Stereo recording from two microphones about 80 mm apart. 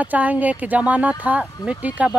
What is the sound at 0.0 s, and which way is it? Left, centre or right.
Speech, centre.